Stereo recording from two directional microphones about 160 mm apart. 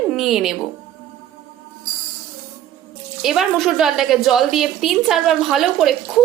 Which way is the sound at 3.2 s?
Centre (ahead or behind).